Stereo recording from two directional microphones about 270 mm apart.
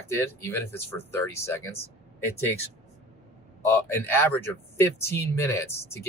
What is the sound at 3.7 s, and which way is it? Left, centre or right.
Speech, centre.